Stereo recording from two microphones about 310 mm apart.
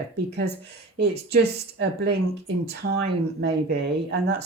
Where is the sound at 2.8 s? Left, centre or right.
Right.